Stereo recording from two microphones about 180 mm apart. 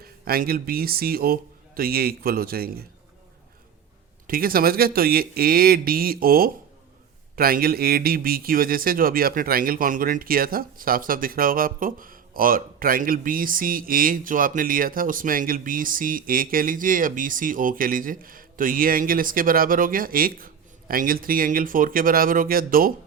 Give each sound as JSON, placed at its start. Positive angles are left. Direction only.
{"t": 0.0, "sound": "speech", "side_deg": -55}
{"t": 4.3, "sound": "speech", "side_deg": -55}